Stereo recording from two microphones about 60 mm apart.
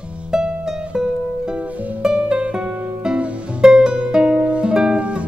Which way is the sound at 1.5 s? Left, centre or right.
Right.